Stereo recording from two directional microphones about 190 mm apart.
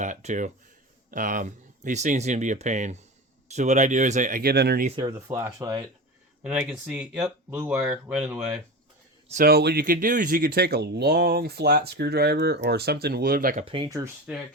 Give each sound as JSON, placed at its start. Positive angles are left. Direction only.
{"t": 0.0, "sound": "speech", "side_deg": -40}
{"t": 4.9, "sound": "speech", "side_deg": -15}
{"t": 6.4, "sound": "speech", "side_deg": -5}
{"t": 9.3, "sound": "speech", "side_deg": -55}
{"t": 13.7, "sound": "speech", "side_deg": -25}